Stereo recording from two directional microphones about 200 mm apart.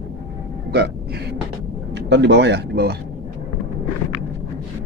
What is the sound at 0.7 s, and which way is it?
Speech, 55° right (ahead or behind).